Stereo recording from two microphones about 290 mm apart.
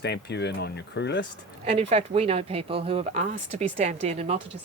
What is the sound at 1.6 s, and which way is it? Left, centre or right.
Speech, right.